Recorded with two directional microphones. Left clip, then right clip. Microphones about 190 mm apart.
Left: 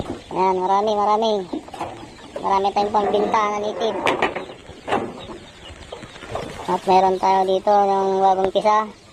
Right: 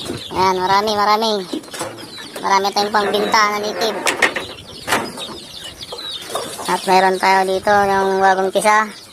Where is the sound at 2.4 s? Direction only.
45° right (ahead or behind).